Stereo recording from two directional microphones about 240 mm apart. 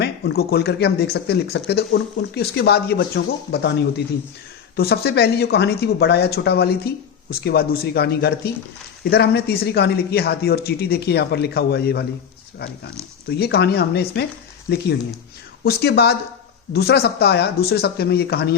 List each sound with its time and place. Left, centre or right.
0.0 s speech: left
13.3 s speech: left
15.6 s speech: left